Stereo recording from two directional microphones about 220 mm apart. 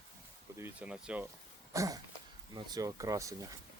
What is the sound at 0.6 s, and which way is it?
Speech, 10° right (ahead or behind).